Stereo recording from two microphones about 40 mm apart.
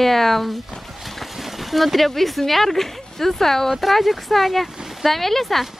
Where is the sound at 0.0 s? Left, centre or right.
Centre.